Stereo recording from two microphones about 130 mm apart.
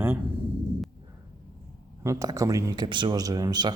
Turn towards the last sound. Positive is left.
turn(degrees=-30)  # may be behind; listen again after turning